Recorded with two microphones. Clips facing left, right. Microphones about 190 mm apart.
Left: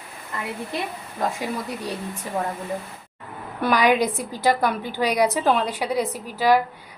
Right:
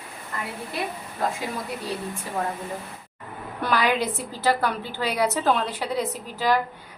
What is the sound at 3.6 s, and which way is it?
A woman's voice, 15° left (ahead or behind).